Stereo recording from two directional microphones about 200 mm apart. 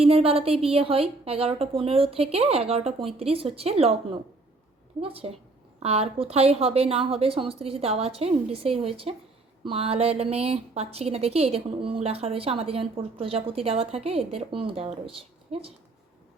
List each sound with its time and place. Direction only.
0.0 s speech: 30° right (ahead or behind)